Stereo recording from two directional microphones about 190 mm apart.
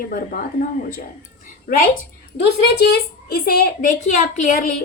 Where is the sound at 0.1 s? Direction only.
45° left (ahead or behind).